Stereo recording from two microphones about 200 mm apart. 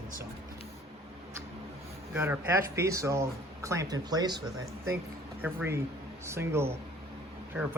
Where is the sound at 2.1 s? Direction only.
10° right (ahead or behind).